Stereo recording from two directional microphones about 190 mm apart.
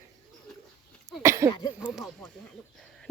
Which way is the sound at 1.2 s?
15° right (ahead or behind).